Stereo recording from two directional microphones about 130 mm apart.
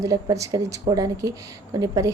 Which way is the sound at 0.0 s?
25° right (ahead or behind).